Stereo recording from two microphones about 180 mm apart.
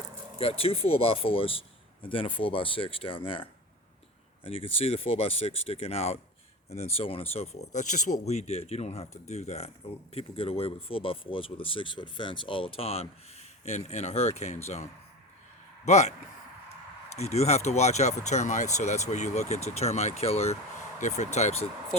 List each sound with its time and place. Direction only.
0.3 s speech: 30° left (ahead or behind)
15.9 s speech: 40° left (ahead or behind)
17.2 s speech: 35° left (ahead or behind)